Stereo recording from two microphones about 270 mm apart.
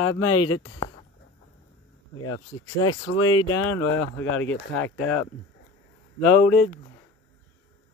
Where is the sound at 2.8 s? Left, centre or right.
Left.